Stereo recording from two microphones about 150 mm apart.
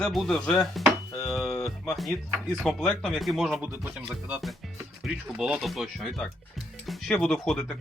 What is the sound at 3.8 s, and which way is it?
Music, 10° right (ahead or behind).